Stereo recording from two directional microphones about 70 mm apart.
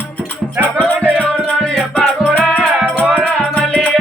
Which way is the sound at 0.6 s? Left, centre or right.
Left.